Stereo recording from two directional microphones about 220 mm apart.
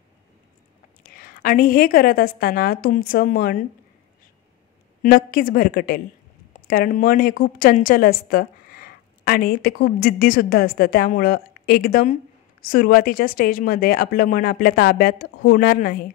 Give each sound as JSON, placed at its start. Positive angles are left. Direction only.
{"t": 1.0, "sound": "a woman's voice", "side_deg": 40}
{"t": 5.0, "sound": "a woman's voice", "side_deg": 40}